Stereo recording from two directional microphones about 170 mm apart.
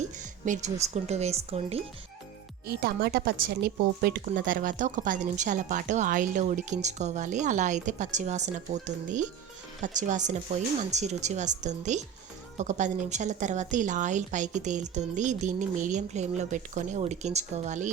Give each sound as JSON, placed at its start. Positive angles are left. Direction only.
{"t": 0.4, "sound": "speech", "side_deg": -45}
{"t": 2.6, "sound": "a woman's voice", "side_deg": -65}
{"t": 4.3, "sound": "a woman's voice", "side_deg": -50}